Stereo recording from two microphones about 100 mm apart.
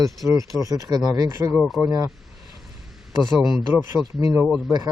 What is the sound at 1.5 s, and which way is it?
Speech, centre (ahead or behind).